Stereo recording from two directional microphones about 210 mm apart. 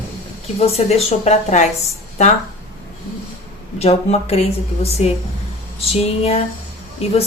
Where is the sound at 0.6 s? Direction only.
30° left (ahead or behind).